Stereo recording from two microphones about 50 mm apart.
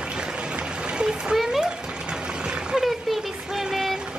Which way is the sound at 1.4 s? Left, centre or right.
Centre.